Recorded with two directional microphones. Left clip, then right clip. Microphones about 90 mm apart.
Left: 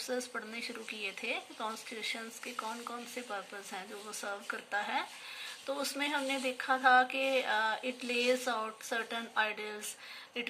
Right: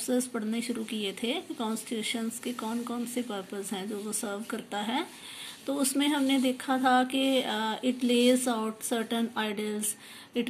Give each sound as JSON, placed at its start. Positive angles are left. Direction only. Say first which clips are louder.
{"t": 0.0, "sound": "speech", "louder": "right 6 dB", "side_deg": -65}